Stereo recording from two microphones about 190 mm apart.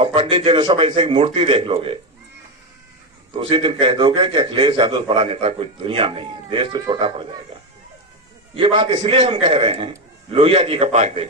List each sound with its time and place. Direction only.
0.0 s a man's voice: 30° right (ahead or behind)
3.3 s a man's voice: 25° right (ahead or behind)
8.5 s a man's voice: 25° right (ahead or behind)